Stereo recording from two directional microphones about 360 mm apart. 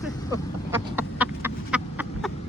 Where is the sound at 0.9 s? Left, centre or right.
Centre.